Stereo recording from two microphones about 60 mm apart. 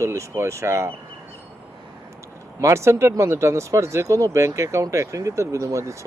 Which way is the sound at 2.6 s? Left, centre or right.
Right.